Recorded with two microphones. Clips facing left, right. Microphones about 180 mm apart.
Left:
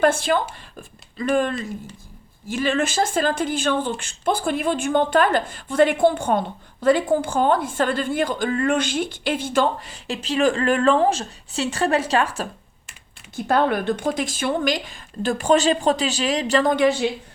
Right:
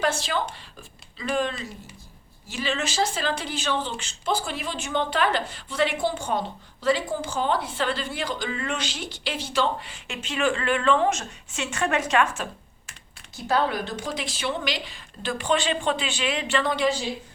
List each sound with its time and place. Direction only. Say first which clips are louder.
0.0 s speech: left 7 dB; 55° left (ahead or behind); by 12.5 s 35° left (ahead or behind)
13.3 s speech: left 5 dB; 55° left (ahead or behind)